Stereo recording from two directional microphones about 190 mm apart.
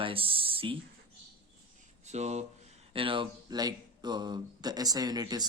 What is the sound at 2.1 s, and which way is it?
Speech, 35° right (ahead or behind).